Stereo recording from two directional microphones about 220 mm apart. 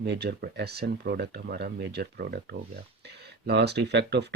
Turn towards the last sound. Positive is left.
turn(degrees=-50)  # may be behind; listen again after turning